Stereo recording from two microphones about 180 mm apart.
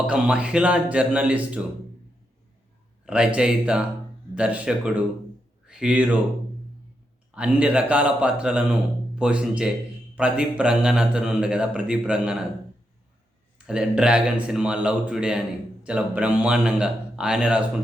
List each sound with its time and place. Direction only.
0.1 s speech: 5° right (ahead or behind)
3.1 s a man's voice: 5° right (ahead or behind)
7.3 s a man's voice: 5° right (ahead or behind)
13.7 s a man's voice: 5° right (ahead or behind)